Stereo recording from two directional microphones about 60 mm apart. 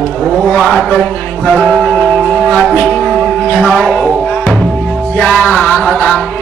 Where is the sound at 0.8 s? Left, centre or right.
Centre.